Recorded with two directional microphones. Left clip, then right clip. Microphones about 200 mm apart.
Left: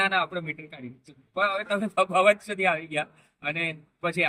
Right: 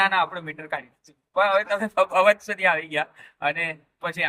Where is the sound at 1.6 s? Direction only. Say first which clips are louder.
Right 3 dB; 10° left (ahead or behind).